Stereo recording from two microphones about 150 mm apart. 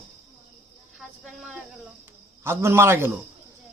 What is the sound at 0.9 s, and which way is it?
Cricket, centre (ahead or behind).